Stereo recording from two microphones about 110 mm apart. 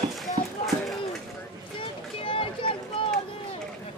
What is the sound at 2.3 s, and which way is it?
Boat, 55° left (ahead or behind).